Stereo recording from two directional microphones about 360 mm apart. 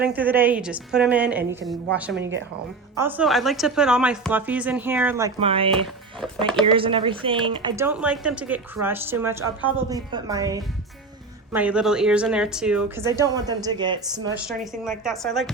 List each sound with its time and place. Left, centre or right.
0.0 s a woman's voice: centre
2.9 s a woman's voice: centre
14.4 s a woman's voice: centre